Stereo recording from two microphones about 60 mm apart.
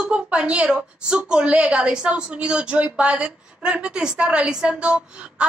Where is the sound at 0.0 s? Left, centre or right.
Centre.